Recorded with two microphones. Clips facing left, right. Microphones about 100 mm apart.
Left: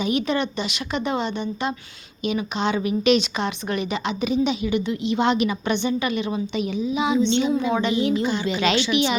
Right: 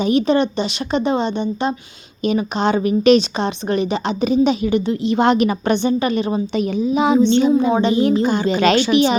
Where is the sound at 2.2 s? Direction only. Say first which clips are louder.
Right 6 dB; 40° right (ahead or behind).